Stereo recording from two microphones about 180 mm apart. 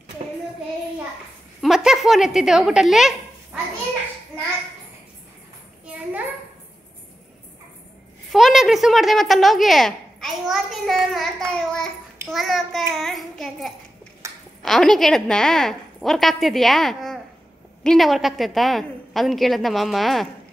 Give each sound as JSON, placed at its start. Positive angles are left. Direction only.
{"t": 1.6, "sound": "speech", "side_deg": 0}
{"t": 8.3, "sound": "a woman's voice", "side_deg": 0}
{"t": 14.2, "sound": "a sound", "side_deg": -15}
{"t": 14.6, "sound": "a woman's voice", "side_deg": 0}